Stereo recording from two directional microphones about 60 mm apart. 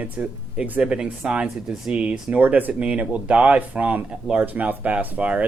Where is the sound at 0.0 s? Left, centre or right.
Right.